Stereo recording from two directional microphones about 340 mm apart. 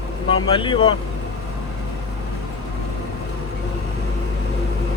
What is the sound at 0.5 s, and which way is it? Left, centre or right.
Speech, centre.